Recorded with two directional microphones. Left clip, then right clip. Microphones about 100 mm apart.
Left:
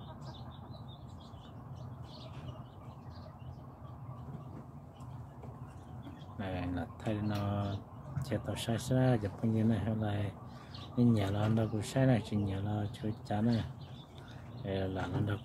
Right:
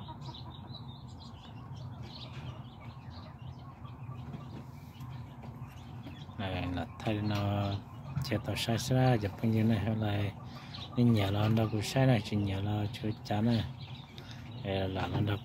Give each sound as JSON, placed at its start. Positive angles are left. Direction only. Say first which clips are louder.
{"t": 6.3, "sound": "a sound", "louder": "right 2 dB", "side_deg": 20}
{"t": 7.4, "sound": "speech", "louder": "right 3 dB", "side_deg": 25}
{"t": 14.6, "sound": "speech", "louder": "right 3 dB", "side_deg": 20}